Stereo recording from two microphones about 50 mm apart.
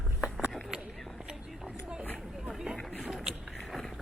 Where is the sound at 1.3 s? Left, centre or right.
Centre.